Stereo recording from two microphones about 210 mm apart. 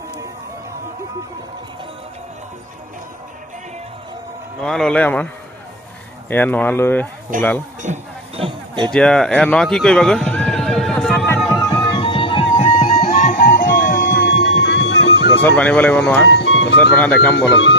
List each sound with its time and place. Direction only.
4.6 s speech: 5° left (ahead or behind)
6.3 s speech: 10° left (ahead or behind)
7.3 s speech: 40° right (ahead or behind)
8.4 s a sound: 25° right (ahead or behind)
8.9 s music: 5° left (ahead or behind)
11.8 s music: 25° left (ahead or behind)
13.0 s music: 35° left (ahead or behind); by 15.4 s 55° left (ahead or behind)
15.5 s speech: 5° left (ahead or behind)
16.2 s music: 60° left (ahead or behind)
16.7 s speech: 5° left (ahead or behind)
17.3 s speech: 60° left (ahead or behind)